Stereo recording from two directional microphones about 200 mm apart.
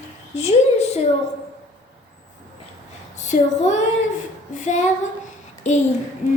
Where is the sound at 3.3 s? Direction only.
35° left (ahead or behind).